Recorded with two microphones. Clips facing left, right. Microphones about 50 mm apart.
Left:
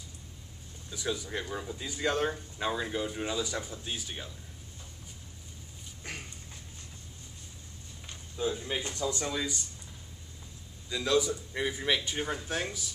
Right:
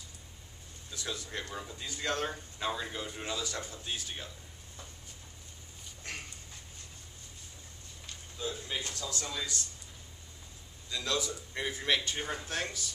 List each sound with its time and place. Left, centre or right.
0.8 s speech: centre
6.0 s a sound: centre
8.1 s speech: centre
10.9 s speech: centre